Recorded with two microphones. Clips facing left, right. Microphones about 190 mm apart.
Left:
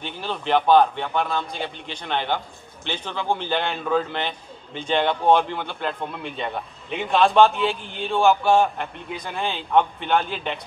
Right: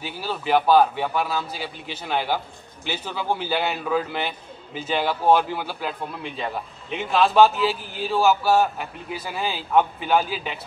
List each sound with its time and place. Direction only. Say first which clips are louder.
0.0 s a man's voice: even; 5° right (ahead or behind)